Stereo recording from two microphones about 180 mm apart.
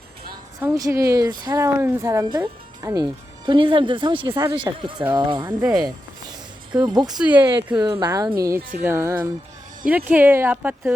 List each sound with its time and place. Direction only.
0.6 s speech: 20° right (ahead or behind)
6.8 s speech: 20° right (ahead or behind)
7.1 s speech: 5° right (ahead or behind)
7.8 s speech: 25° right (ahead or behind)